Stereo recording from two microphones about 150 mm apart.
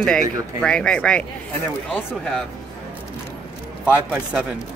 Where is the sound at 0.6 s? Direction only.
5° left (ahead or behind).